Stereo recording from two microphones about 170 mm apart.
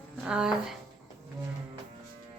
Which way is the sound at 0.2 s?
5° right (ahead or behind).